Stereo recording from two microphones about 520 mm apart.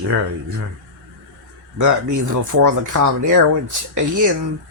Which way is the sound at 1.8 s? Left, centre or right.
Right.